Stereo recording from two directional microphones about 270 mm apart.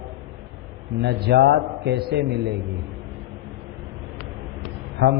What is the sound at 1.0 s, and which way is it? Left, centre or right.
Speech, right.